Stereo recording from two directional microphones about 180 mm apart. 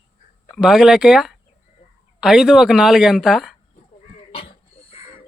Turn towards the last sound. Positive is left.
turn(degrees=35)  # may be behind; listen again after turning